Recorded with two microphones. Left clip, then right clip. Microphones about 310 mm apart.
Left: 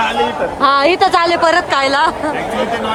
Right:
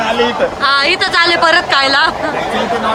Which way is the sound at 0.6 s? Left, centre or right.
Centre.